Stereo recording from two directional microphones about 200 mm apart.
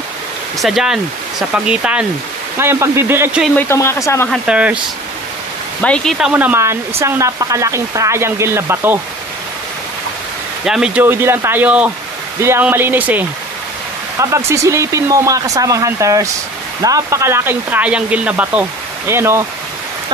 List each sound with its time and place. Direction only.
0.6 s speech: centre (ahead or behind)
3.5 s speech: 10° left (ahead or behind)
4.3 s speech: 5° right (ahead or behind)
5.8 s speech: 5° left (ahead or behind); by 8.9 s 10° right (ahead or behind)
10.6 s speech: 5° right (ahead or behind)
14.2 s speech: 15° right (ahead or behind)